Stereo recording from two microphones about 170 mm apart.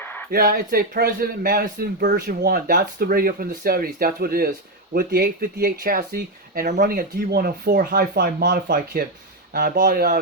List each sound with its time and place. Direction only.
0.3 s speech: 60° right (ahead or behind)